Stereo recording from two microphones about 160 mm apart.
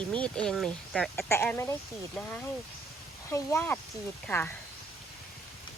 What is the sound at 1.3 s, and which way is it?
Speech, 15° left (ahead or behind).